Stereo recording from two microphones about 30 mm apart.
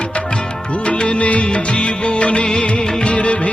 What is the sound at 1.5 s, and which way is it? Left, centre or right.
Music of bollywood, left.